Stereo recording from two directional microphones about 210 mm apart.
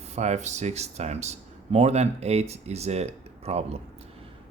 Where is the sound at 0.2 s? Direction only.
35° right (ahead or behind).